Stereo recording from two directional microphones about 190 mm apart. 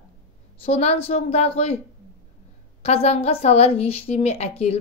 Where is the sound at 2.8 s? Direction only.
35° left (ahead or behind).